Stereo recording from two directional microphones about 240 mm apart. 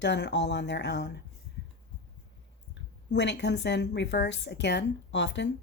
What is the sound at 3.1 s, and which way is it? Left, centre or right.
Speech, left.